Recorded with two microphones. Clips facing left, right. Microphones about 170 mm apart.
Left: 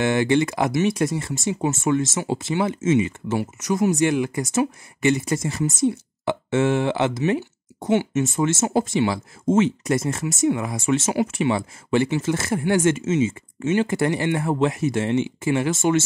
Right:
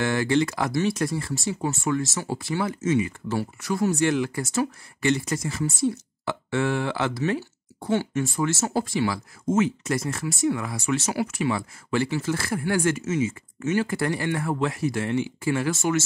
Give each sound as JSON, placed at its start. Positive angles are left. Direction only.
{"t": 0.0, "sound": "speech", "side_deg": 20}